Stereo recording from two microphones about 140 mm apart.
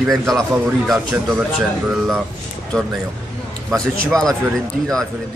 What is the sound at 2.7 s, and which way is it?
Speech, 5° left (ahead or behind).